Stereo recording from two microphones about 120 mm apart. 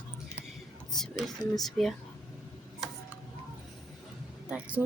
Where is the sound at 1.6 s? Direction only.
Centre (ahead or behind).